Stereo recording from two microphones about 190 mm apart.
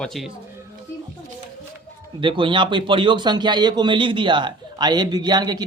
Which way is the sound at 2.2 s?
25° right (ahead or behind).